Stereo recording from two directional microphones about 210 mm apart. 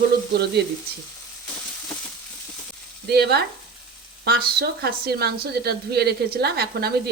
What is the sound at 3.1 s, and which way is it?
Speech, 50° right (ahead or behind).